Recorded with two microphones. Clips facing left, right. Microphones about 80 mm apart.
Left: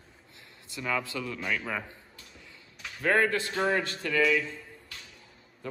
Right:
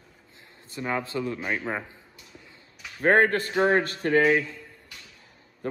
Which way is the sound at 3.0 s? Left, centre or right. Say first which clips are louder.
Right 5 dB; right.